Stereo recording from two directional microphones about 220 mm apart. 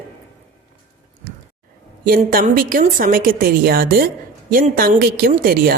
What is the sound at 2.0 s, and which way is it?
A woman's voice, 40° right (ahead or behind).